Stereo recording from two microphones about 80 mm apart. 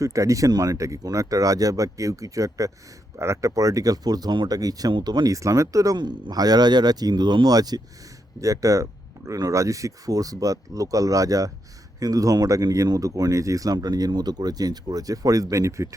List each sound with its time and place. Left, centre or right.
0.0 s speech: right
6.0 s speech: right
8.4 s speech: right